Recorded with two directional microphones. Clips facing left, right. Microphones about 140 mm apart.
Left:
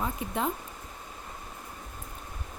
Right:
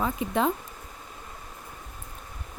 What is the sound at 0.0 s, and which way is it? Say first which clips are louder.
Speech: right 5 dB; 90° right.